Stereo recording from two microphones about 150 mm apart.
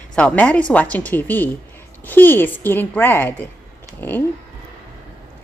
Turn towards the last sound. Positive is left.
turn(degrees=15)  # may be behind; listen again after turning